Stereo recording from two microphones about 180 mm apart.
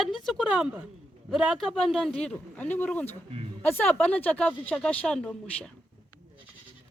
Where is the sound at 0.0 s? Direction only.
Centre (ahead or behind).